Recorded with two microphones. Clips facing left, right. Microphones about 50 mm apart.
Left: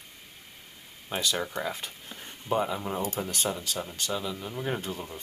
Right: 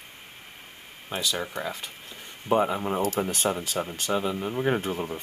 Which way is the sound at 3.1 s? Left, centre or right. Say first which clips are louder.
Right 5 dB; right.